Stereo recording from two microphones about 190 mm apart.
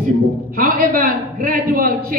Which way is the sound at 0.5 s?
50° right (ahead or behind).